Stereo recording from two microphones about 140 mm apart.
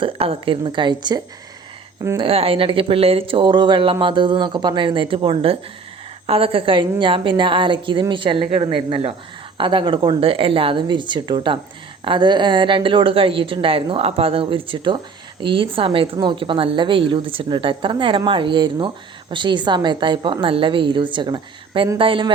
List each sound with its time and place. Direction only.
0.0 s speech: 40° right (ahead or behind)